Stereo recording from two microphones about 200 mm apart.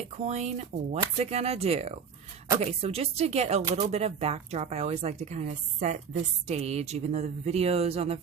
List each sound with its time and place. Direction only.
0.0 s speech: 35° right (ahead or behind)